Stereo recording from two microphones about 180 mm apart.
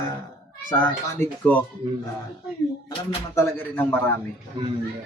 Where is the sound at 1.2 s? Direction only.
10° left (ahead or behind).